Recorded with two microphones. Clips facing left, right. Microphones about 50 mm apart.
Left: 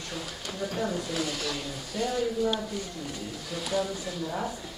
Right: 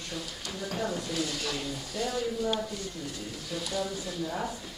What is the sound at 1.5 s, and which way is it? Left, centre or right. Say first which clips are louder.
Speech: even; centre.